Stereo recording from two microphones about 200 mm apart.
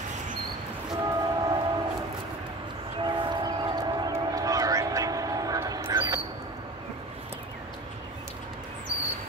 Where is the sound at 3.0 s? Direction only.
25° right (ahead or behind).